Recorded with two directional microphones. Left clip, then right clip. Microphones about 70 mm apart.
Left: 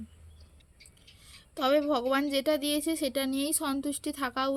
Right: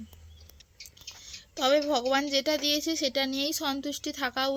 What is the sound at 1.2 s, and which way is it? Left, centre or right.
A woman's voice, left.